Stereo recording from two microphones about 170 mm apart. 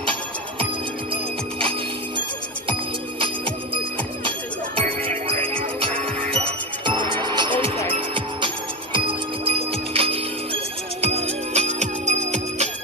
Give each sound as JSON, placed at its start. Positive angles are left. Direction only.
{"t": 5.0, "sound": "music", "side_deg": -35}